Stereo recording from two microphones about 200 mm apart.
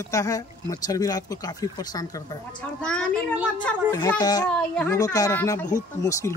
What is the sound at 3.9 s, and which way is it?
Speech, 20° left (ahead or behind).